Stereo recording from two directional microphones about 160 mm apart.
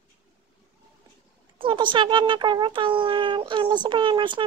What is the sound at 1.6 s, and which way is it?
A child's voice, 30° right (ahead or behind).